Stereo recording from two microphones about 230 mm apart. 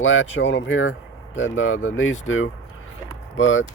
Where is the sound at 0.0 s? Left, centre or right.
Left.